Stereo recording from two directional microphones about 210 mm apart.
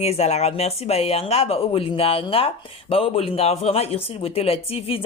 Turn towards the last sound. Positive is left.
turn(degrees=25)  # may be behind; listen again after turning